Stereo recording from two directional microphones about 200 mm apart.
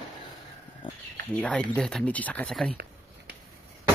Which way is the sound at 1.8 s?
5° left (ahead or behind).